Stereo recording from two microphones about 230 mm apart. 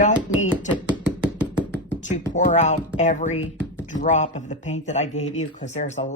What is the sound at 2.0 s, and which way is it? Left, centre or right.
Speech, left.